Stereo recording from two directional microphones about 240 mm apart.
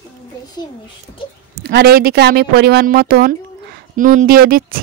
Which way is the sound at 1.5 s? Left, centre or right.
Right.